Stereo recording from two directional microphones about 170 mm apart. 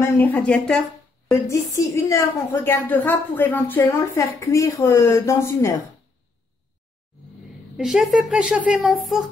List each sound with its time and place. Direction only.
0.2 s a woman's voice: 10° left (ahead or behind)
1.5 s a woman's voice: 15° left (ahead or behind)
7.7 s speech: centre (ahead or behind)